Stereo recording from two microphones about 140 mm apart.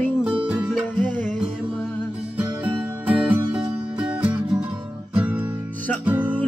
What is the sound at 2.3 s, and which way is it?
Music, 10° right (ahead or behind).